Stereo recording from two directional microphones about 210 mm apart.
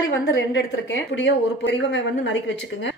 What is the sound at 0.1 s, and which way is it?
Speech, 55° left (ahead or behind).